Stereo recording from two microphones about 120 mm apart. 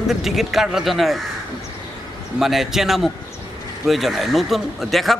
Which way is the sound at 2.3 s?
Centre (ahead or behind).